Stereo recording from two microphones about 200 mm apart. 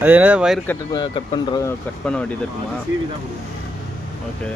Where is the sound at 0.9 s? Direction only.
20° left (ahead or behind).